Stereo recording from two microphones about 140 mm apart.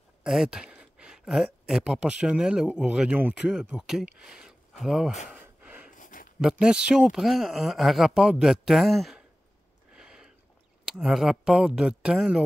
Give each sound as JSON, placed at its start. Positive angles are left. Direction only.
{"t": 0.2, "sound": "speech", "side_deg": -5}
{"t": 5.3, "sound": "gasp", "side_deg": -10}
{"t": 5.9, "sound": "a sound", "side_deg": 70}
{"t": 6.6, "sound": "speech", "side_deg": -5}
{"t": 9.9, "sound": "a sound", "side_deg": -5}
{"t": 10.9, "sound": "speech", "side_deg": -5}